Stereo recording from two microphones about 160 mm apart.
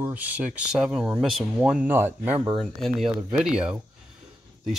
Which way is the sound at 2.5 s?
Centre (ahead or behind).